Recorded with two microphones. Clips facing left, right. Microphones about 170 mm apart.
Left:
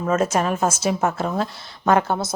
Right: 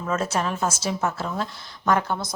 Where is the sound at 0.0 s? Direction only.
45° left (ahead or behind).